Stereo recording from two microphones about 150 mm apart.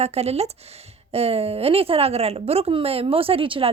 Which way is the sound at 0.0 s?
45° right (ahead or behind).